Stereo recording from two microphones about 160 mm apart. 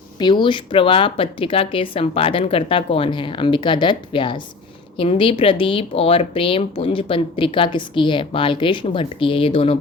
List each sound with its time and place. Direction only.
0.2 s speech: 30° left (ahead or behind)